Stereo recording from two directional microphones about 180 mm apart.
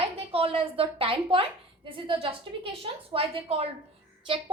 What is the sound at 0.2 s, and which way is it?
A woman's voice, 30° right (ahead or behind).